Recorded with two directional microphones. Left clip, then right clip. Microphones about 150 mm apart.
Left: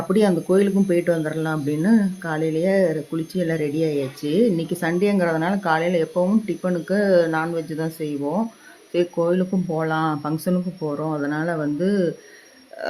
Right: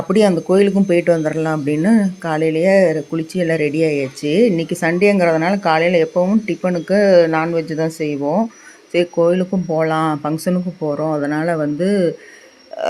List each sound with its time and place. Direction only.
0.1 s speech: 15° right (ahead or behind)